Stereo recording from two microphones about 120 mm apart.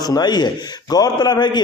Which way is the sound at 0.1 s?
35° left (ahead or behind).